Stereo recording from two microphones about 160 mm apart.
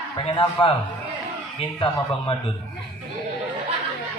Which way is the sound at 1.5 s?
35° left (ahead or behind).